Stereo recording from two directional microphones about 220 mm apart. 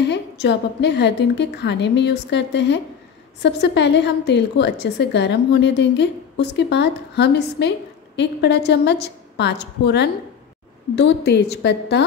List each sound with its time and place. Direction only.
0.0 s a woman's voice: 50° left (ahead or behind)